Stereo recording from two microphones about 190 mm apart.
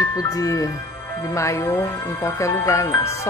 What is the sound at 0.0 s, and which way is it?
Speech, 20° left (ahead or behind).